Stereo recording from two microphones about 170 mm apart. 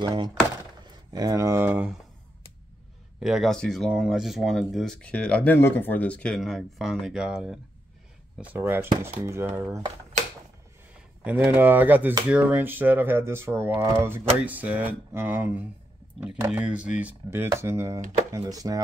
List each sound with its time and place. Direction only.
0.0 s speech: 25° right (ahead or behind); by 2.0 s 10° right (ahead or behind)
3.2 s speech: centre (ahead or behind)
11.2 s speech: 10° right (ahead or behind)